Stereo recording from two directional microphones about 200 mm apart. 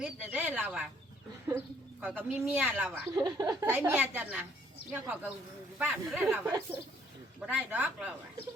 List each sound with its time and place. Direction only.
0.0 s speech: 5° right (ahead or behind)